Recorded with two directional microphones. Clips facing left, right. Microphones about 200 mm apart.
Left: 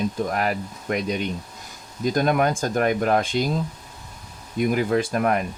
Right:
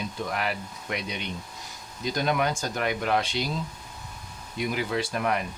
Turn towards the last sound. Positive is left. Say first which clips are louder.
# left 6 dB
turn(degrees=50)  # may be behind; listen again after turning